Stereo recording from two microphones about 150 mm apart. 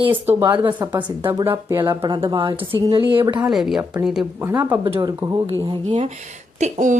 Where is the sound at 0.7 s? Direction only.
30° right (ahead or behind).